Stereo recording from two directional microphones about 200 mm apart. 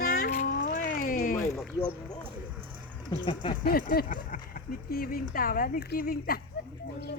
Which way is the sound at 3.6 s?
45° left (ahead or behind).